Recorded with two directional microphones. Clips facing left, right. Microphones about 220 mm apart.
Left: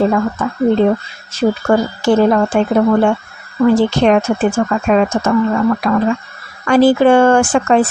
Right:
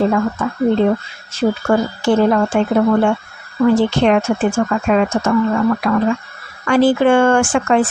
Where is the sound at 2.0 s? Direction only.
40° left (ahead or behind).